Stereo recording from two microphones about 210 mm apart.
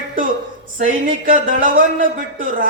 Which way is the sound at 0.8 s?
40° right (ahead or behind).